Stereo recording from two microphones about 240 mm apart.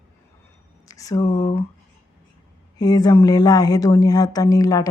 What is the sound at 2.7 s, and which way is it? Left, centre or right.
Speech, centre.